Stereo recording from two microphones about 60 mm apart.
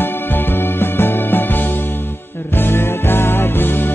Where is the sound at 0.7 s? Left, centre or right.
Left.